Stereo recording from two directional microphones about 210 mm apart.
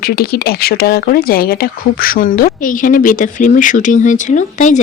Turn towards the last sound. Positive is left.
turn(degrees=35)  # may be behind; listen again after turning